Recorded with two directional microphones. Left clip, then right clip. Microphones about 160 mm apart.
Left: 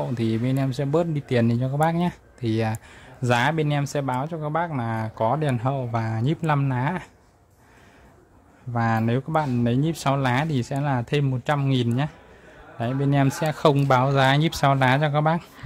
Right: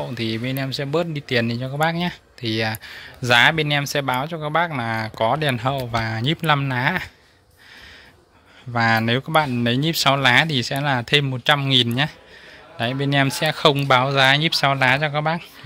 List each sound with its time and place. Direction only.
0.1 s speech: 15° left (ahead or behind); by 7.1 s 5° right (ahead or behind)
8.7 s speech: 5° right (ahead or behind); by 15.4 s 15° left (ahead or behind)